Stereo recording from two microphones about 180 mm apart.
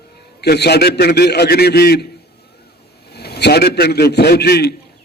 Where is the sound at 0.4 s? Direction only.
65° left (ahead or behind).